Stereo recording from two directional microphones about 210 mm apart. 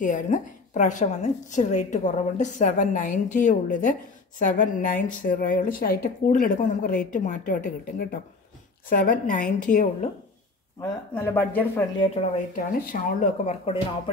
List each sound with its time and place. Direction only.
0.0 s speech: 35° left (ahead or behind)
10.8 s speech: 10° left (ahead or behind)
12.5 s speech: 40° left (ahead or behind)